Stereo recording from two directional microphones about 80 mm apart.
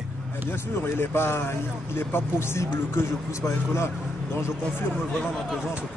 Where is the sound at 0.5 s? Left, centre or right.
Left.